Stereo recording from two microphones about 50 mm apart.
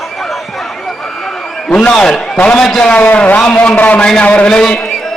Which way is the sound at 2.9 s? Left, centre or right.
Left.